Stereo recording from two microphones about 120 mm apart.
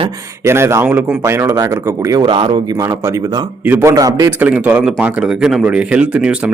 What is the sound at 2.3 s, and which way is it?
Speech, 40° right (ahead or behind).